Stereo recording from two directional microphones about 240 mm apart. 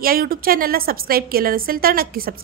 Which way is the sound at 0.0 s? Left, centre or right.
Right.